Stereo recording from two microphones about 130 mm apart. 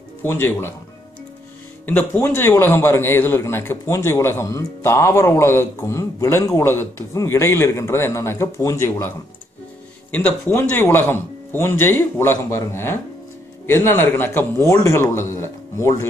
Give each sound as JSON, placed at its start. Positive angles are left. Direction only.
{"t": 0.2, "sound": "speech", "side_deg": 15}
{"t": 1.9, "sound": "a man's voice", "side_deg": 15}
{"t": 10.1, "sound": "a man's voice", "side_deg": 15}